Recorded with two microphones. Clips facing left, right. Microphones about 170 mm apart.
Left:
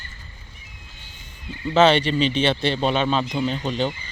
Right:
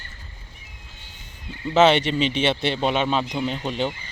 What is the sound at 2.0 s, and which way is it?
Speech, 20° right (ahead or behind).